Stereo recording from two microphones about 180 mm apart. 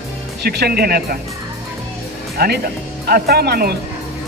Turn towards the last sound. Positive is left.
turn(degrees=-60)  # may be behind; listen again after turning